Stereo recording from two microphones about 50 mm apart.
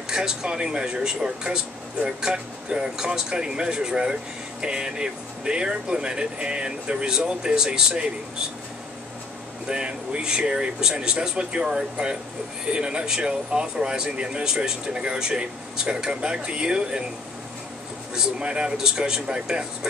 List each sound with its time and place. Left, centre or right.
0.1 s speech: centre
9.7 s speech: centre
18.1 s speech: centre